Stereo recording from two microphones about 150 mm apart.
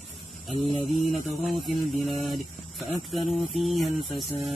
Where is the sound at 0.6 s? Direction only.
40° left (ahead or behind).